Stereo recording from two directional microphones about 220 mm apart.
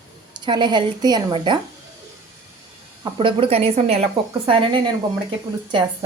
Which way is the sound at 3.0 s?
25° right (ahead or behind).